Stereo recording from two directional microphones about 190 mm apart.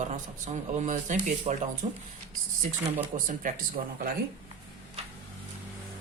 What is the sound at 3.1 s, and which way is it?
Speech, 45° right (ahead or behind).